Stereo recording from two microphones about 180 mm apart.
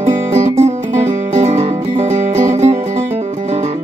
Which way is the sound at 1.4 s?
40° right (ahead or behind).